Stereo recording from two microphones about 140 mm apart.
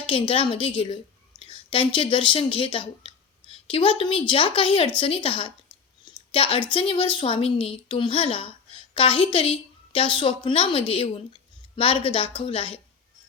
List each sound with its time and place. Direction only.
0.1 s a woman's voice: 40° left (ahead or behind)